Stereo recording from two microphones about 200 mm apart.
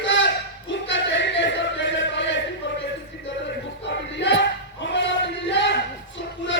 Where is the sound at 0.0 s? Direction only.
65° left (ahead or behind).